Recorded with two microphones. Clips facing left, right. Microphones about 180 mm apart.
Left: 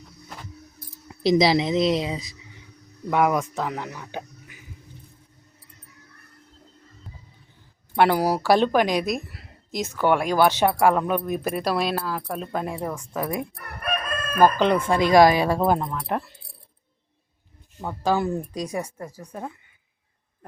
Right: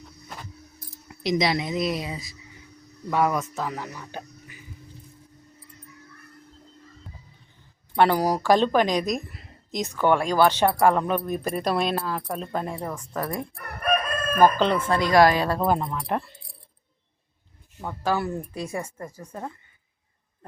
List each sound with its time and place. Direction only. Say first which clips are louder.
1.2 s speech: left 5 dB; 30° left (ahead or behind); by 4.6 s 10° left (ahead or behind)
7.9 s speech: left 1 dB; 10° left (ahead or behind)
14.6 s speech: left 2 dB; 15° left (ahead or behind)
15.8 s speech: even; centre (ahead or behind)
17.7 s speech: left 3 dB; 10° left (ahead or behind)